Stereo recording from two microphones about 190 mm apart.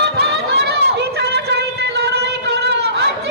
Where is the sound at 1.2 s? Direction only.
60° right (ahead or behind).